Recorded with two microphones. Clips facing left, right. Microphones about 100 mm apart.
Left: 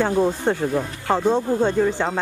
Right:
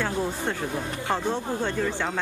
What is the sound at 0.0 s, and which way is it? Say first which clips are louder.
Speech: left 8 dB; 30° left (ahead or behind).